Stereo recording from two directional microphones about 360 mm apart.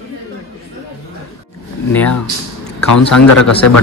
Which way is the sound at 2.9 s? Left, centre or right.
Left.